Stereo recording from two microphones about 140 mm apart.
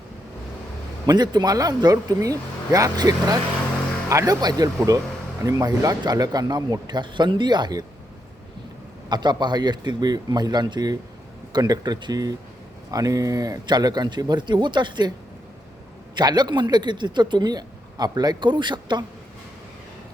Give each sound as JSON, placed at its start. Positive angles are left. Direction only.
{"t": 1.0, "sound": "speech", "side_deg": -30}
{"t": 9.0, "sound": "speech", "side_deg": -30}
{"t": 16.1, "sound": "speech", "side_deg": -30}